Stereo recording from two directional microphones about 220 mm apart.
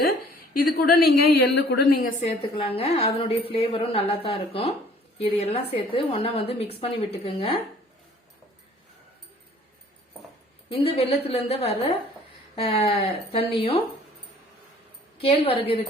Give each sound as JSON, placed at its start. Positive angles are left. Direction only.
{"t": 0.5, "sound": "a woman's voice", "side_deg": 45}
{"t": 2.2, "sound": "a woman's voice", "side_deg": 25}
{"t": 10.7, "sound": "a woman's voice", "side_deg": 25}
{"t": 15.2, "sound": "a woman's voice", "side_deg": 25}